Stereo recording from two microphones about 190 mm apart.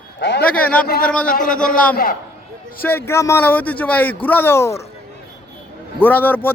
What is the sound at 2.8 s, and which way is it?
Speech, 10° left (ahead or behind).